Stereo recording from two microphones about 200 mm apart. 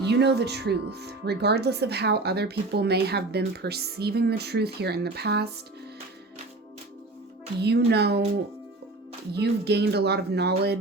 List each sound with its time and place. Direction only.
0.0 s speech: 60° right (ahead or behind)
7.6 s speech: 55° right (ahead or behind)
9.3 s speech: 55° right (ahead or behind)